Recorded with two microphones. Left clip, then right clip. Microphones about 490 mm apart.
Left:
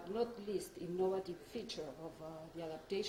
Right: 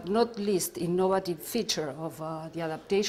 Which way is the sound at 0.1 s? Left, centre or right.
Right.